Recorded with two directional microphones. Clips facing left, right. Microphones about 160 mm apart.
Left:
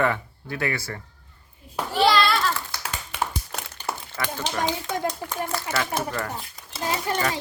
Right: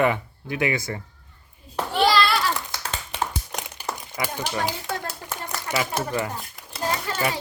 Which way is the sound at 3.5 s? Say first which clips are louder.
Left 1 dB; 15° right (ahead or behind).